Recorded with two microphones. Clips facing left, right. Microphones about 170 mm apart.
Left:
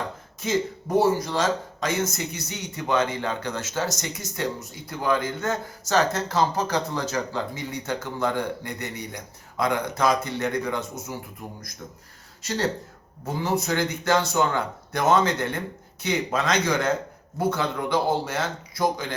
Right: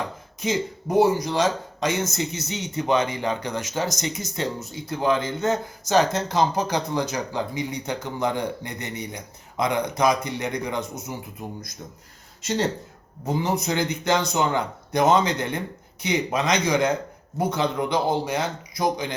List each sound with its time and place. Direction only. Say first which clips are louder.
0.3 s speech: even; 15° right (ahead or behind)